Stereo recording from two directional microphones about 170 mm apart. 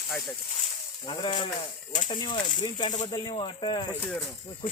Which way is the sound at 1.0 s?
30° left (ahead or behind).